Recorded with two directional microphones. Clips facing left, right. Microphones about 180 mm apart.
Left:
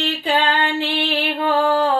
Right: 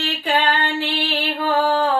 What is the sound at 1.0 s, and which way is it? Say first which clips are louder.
Music: left 2 dB; 25° left (ahead or behind).